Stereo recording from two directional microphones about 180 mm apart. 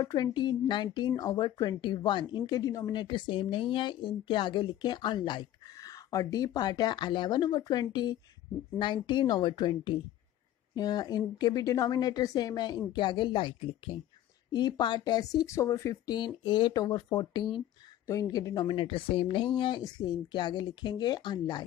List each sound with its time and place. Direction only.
0.0 s speech: 20° left (ahead or behind)